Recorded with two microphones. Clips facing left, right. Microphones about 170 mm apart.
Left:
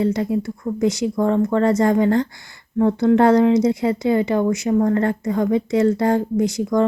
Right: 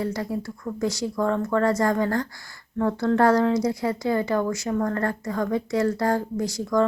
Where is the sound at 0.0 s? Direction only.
20° left (ahead or behind).